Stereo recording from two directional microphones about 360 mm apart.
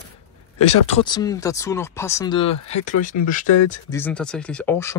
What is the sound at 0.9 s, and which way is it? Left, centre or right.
Speech, centre.